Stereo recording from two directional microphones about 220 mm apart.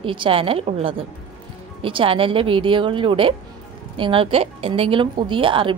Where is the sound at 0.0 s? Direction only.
25° right (ahead or behind).